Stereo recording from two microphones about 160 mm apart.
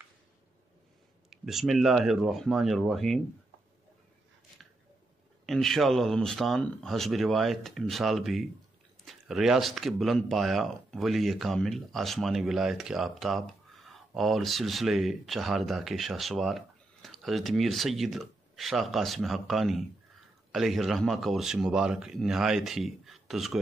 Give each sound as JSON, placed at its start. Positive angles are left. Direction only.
{"t": 1.3, "sound": "speech", "side_deg": 0}
{"t": 5.5, "sound": "speech", "side_deg": 0}